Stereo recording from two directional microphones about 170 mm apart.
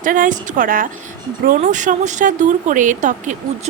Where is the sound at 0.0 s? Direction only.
50° right (ahead or behind).